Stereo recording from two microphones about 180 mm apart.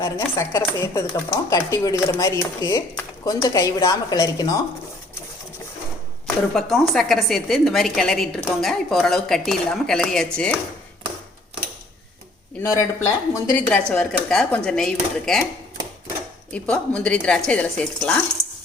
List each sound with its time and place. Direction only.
0.0 s a woman's voice: 15° left (ahead or behind)
6.2 s speech: centre (ahead or behind)
12.6 s speech: 15° left (ahead or behind)
16.5 s speech: 5° left (ahead or behind)